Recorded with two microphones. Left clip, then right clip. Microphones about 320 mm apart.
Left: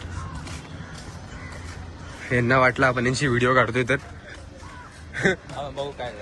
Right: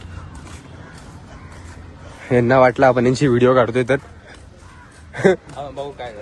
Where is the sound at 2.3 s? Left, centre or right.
Centre.